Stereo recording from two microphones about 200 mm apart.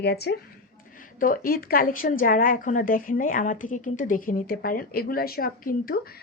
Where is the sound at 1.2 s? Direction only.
45° left (ahead or behind).